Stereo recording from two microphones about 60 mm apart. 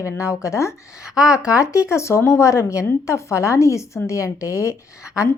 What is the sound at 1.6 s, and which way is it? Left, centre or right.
A woman's voice, left.